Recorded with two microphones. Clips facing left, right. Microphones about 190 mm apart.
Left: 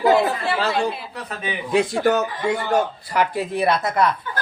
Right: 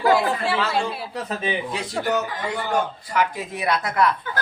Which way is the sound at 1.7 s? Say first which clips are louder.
Left 11 dB; 50° left (ahead or behind).